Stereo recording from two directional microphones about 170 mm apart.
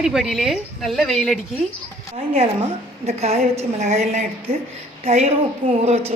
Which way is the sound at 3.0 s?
40° right (ahead or behind).